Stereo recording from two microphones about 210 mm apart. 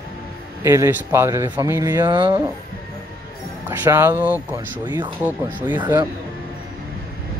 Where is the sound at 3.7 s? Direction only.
10° right (ahead or behind).